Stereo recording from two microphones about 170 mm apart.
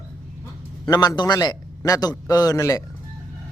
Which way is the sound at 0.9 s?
25° left (ahead or behind).